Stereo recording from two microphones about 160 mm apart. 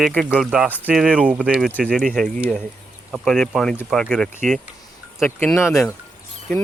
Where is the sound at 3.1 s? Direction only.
Centre (ahead or behind).